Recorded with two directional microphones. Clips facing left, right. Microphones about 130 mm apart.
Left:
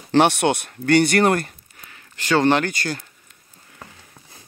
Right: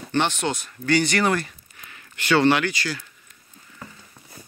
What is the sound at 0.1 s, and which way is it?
Speech, 70° left (ahead or behind).